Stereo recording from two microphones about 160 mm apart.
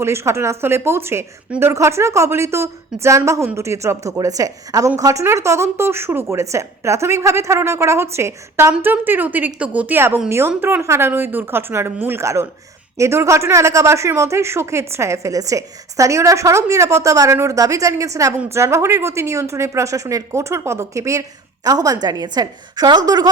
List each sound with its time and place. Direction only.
0.0 s a woman's voice: 15° right (ahead or behind)